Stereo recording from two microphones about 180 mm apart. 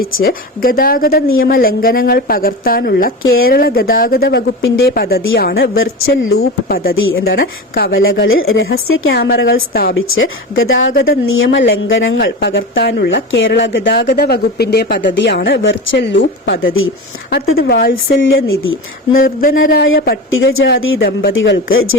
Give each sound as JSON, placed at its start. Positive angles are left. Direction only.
{"t": 0.2, "sound": "a woman's voice", "side_deg": 55}
{"t": 5.0, "sound": "a woman's voice", "side_deg": 60}
{"t": 6.9, "sound": "a woman's voice", "side_deg": 90}
{"t": 9.0, "sound": "a woman's voice", "side_deg": 65}
{"t": 17.2, "sound": "a woman's voice", "side_deg": 55}
{"t": 18.2, "sound": "a woman's voice", "side_deg": 90}
{"t": 19.1, "sound": "speech", "side_deg": 50}
{"t": 19.8, "sound": "a woman's voice", "side_deg": 80}